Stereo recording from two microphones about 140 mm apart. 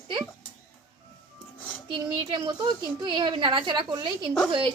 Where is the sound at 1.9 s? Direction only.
35° right (ahead or behind).